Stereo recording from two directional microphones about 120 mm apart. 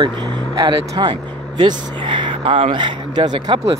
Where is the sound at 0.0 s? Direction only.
35° right (ahead or behind).